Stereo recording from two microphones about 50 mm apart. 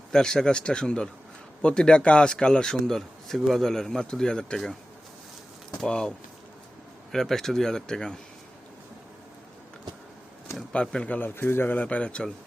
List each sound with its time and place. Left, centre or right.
0.1 s speech: centre
5.8 s speech: centre
10.7 s speech: left
11.2 s speech: left